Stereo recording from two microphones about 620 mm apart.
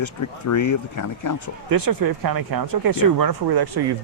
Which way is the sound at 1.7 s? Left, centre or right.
Right.